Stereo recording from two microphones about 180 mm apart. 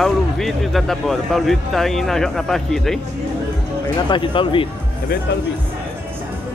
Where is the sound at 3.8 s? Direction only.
25° left (ahead or behind).